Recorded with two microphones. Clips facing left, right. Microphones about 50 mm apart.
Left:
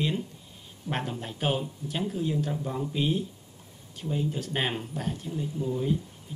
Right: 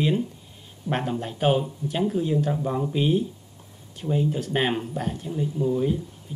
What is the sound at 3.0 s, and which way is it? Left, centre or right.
Speech, centre.